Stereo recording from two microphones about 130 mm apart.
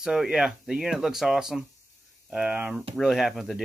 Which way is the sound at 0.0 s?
5° right (ahead or behind).